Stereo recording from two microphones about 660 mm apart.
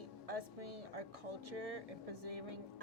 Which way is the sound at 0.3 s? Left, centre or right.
Right.